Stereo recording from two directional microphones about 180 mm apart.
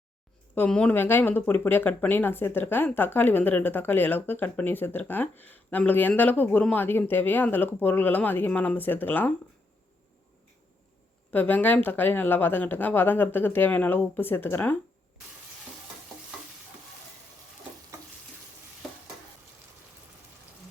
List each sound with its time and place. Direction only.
0.5 s speech: 5° left (ahead or behind)
11.3 s speech: 10° left (ahead or behind)